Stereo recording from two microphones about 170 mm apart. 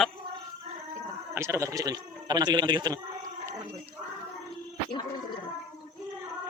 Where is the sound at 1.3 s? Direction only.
15° right (ahead or behind).